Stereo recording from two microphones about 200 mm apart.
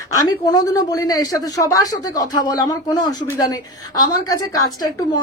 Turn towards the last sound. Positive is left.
turn(degrees=20)  # may be behind; listen again after turning